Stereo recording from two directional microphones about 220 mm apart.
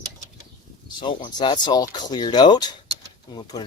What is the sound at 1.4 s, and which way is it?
Speech, 20° left (ahead or behind).